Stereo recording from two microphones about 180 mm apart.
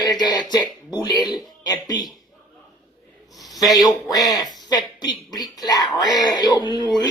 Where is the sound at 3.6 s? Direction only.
20° left (ahead or behind).